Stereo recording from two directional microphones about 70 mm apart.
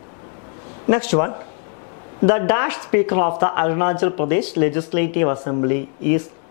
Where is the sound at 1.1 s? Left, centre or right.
Left.